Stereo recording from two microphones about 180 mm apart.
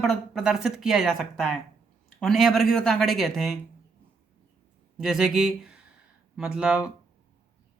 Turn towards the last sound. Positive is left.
turn(degrees=-5)  # may be behind; listen again after turning